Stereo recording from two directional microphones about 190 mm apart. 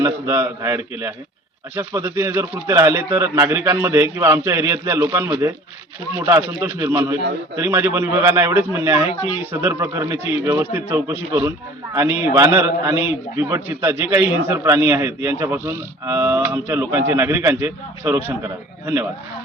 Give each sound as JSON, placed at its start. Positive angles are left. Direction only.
{"t": 0.0, "sound": "a man's voice", "side_deg": -15}